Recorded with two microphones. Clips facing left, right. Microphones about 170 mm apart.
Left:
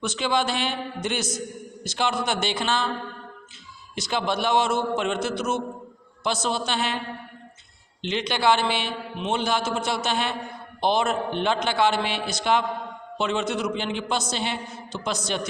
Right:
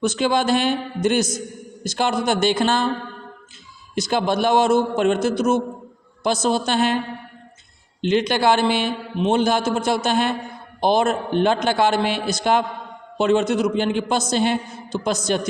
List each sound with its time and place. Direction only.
0.0 s a man's voice: 45° right (ahead or behind)
3.9 s a man's voice: 45° right (ahead or behind)
8.0 s a man's voice: 45° right (ahead or behind)